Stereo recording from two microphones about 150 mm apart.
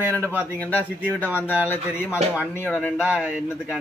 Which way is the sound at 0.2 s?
15° right (ahead or behind).